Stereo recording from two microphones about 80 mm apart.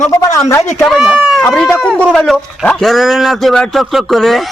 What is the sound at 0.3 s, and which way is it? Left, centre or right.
Speech, left.